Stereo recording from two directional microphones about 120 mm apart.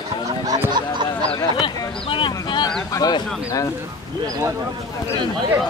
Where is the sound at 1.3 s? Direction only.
45° left (ahead or behind).